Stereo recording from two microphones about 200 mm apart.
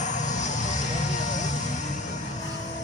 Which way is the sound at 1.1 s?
40° left (ahead or behind).